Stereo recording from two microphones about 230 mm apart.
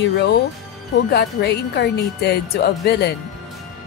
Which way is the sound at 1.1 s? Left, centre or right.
Left.